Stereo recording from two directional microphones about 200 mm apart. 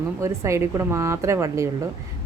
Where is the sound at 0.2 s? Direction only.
15° right (ahead or behind).